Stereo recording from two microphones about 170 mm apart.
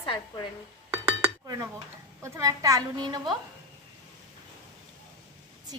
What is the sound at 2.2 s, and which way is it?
A child's voice, 20° right (ahead or behind).